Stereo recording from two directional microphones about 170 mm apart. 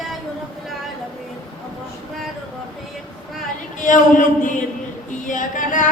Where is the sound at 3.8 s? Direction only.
50° left (ahead or behind).